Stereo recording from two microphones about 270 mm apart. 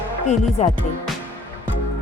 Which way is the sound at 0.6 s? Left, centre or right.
Left.